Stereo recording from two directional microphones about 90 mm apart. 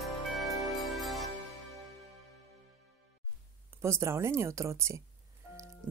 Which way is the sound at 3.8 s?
30° right (ahead or behind).